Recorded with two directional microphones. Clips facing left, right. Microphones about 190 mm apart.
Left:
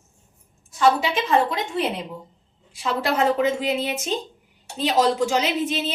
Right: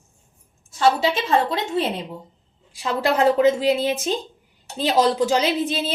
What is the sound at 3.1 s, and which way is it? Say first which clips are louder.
Speech: right 5 dB; 35° right (ahead or behind).